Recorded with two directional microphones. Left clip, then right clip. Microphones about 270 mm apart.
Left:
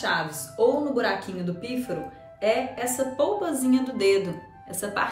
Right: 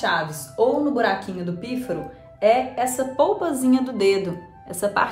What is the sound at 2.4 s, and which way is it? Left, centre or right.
A woman's voice, centre.